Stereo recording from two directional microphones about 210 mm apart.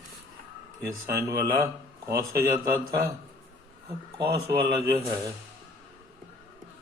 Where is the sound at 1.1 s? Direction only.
15° right (ahead or behind).